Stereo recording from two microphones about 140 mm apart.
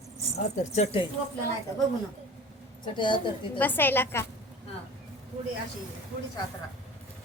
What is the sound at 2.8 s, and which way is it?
Speech, 35° left (ahead or behind).